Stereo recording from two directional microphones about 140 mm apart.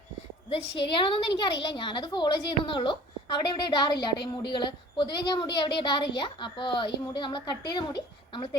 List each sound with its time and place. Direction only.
0.5 s a woman's voice: 40° left (ahead or behind)